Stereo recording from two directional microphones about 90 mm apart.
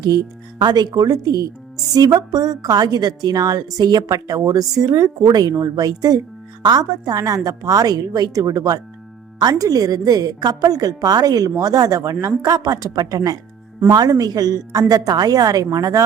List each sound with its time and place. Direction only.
0.6 s a woman's voice: 55° right (ahead or behind); by 16.0 s 40° right (ahead or behind)